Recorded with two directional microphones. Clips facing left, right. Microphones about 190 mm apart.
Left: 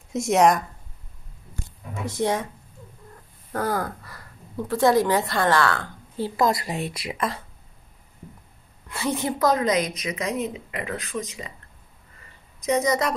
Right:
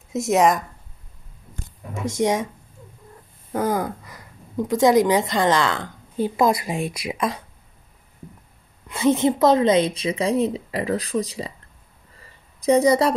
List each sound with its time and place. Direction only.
0.1 s speech: centre (ahead or behind)
2.2 s speech: 15° right (ahead or behind)
3.5 s speech: 15° right (ahead or behind)
8.8 s a woman's voice: 20° right (ahead or behind); by 11.5 s 35° right (ahead or behind)
12.5 s a woman's voice: 30° right (ahead or behind)